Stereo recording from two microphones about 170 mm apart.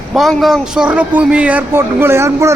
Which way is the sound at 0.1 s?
Centre (ahead or behind).